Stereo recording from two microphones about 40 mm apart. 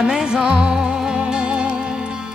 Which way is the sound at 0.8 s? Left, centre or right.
Centre.